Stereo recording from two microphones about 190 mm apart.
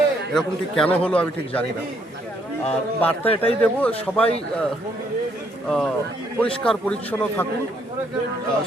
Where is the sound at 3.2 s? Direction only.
30° left (ahead or behind).